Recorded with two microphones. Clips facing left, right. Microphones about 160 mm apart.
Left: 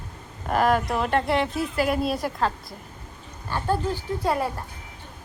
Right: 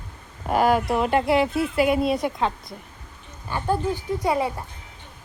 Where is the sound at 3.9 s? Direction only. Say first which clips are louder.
Right 2 dB; 15° right (ahead or behind).